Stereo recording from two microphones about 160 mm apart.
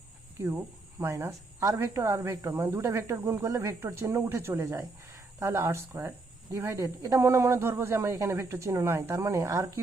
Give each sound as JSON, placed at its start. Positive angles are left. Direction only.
{"t": 0.4, "sound": "a woman's voice", "side_deg": -15}